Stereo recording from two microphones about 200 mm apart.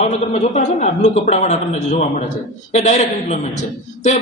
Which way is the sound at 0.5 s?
35° left (ahead or behind).